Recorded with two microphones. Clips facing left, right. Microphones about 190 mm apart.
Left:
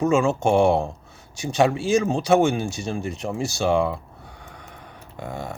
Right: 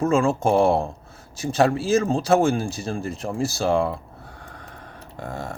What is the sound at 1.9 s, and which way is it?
Speech, 15° left (ahead or behind).